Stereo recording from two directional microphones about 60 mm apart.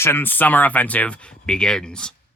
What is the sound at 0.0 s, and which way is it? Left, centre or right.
Speech, left.